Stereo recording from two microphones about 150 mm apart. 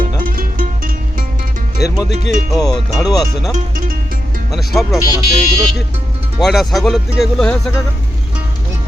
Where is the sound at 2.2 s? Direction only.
55° right (ahead or behind).